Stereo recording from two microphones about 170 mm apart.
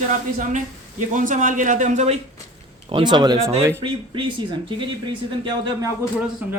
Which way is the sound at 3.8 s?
30° right (ahead or behind).